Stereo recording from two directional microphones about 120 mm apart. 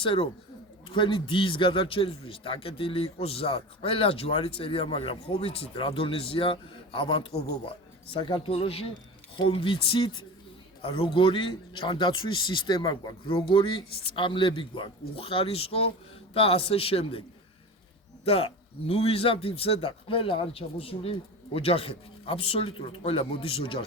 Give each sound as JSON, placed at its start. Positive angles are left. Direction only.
{"t": 0.0, "sound": "a man's voice", "side_deg": 45}
{"t": 18.3, "sound": "a man's voice", "side_deg": 55}